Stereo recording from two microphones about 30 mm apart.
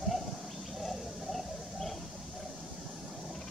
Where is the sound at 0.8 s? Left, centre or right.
Centre.